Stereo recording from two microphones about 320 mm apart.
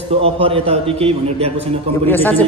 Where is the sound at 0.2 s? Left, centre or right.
Centre.